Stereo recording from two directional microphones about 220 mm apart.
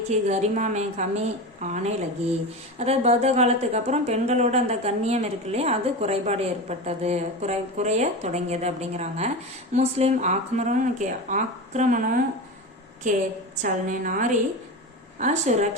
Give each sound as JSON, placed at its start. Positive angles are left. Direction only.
{"t": 0.1, "sound": "speech", "side_deg": -30}